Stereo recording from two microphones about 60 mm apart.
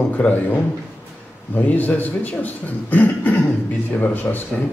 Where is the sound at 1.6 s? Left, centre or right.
Left.